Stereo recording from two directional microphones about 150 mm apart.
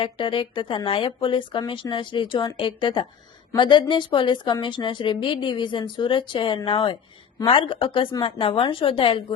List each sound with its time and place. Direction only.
0.0 s speech: 35° left (ahead or behind)